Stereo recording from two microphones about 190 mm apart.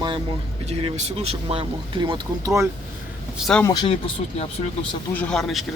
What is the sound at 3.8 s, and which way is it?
Speech, 30° left (ahead or behind).